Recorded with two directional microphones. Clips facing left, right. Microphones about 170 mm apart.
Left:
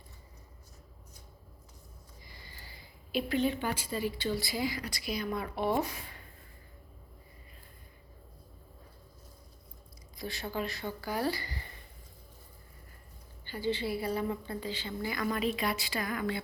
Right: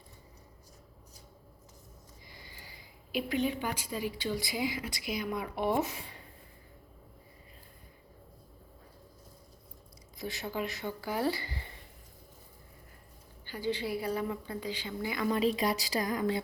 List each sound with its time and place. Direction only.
2.3 s a woman's voice: 15° right (ahead or behind)
10.2 s a woman's voice: 20° right (ahead or behind)
13.5 s a woman's voice: 10° right (ahead or behind); by 16.4 s 35° right (ahead or behind)